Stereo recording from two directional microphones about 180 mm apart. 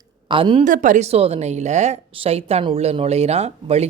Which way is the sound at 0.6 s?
45° right (ahead or behind).